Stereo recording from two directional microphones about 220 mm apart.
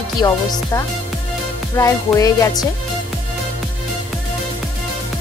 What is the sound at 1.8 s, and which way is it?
Music, 15° left (ahead or behind).